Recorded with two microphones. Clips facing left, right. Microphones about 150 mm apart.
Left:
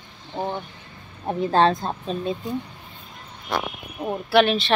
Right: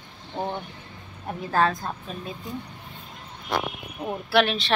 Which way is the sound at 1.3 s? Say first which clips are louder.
Left 5 dB; 25° left (ahead or behind).